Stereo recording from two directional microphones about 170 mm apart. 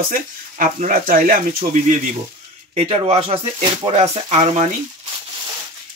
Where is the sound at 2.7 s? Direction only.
35° right (ahead or behind).